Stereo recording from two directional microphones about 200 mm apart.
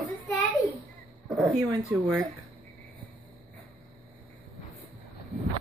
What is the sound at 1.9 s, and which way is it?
Speech, 10° right (ahead or behind).